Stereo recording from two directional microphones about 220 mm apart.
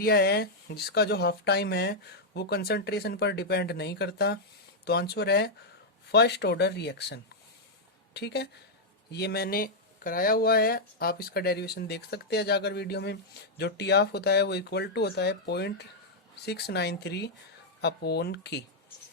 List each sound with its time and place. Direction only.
0.0 s speech: 45° left (ahead or behind)